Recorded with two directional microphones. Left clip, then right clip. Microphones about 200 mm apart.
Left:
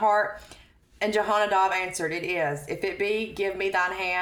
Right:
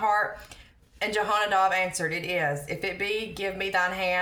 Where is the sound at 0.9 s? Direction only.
25° left (ahead or behind).